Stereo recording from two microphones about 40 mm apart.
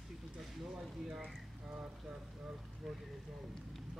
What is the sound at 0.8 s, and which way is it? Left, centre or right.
Speech, centre.